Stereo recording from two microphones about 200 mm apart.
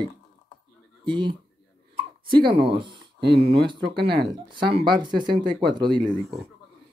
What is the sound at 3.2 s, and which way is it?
Speech, 55° right (ahead or behind).